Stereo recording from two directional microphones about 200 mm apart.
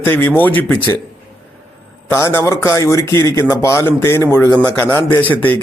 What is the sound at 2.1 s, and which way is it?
A man's voice, 15° left (ahead or behind).